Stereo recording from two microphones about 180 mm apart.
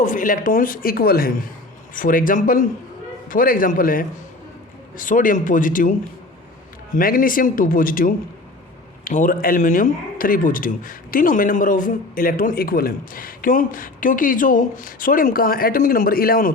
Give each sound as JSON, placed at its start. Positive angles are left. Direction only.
{"t": 0.0, "sound": "speech", "side_deg": 45}
{"t": 6.9, "sound": "speech", "side_deg": 50}